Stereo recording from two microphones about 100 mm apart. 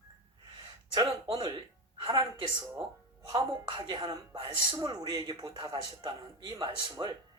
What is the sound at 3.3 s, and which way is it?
A woman's voice, 50° right (ahead or behind).